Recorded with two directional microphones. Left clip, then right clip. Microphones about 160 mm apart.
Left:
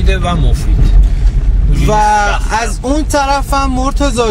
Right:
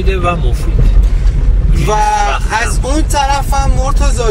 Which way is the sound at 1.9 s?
25° left (ahead or behind).